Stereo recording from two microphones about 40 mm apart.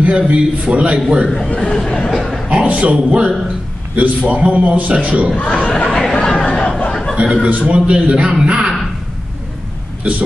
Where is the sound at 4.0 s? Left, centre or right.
Right.